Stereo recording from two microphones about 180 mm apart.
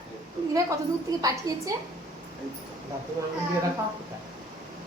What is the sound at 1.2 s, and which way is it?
Speech, 20° right (ahead or behind).